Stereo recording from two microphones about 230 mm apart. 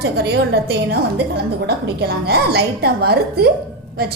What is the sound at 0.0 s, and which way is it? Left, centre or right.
A woman's voice, right.